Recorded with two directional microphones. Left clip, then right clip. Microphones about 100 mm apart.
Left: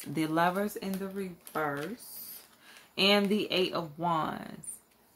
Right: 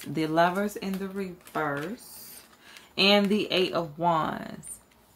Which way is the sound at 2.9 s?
10° left (ahead or behind).